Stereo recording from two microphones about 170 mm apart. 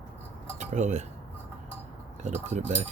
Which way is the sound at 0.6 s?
45° right (ahead or behind).